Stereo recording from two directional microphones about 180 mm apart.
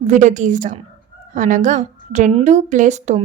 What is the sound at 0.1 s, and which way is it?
A woman's voice, 45° right (ahead or behind).